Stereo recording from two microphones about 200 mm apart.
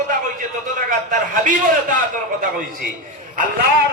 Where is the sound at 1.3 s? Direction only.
40° right (ahead or behind).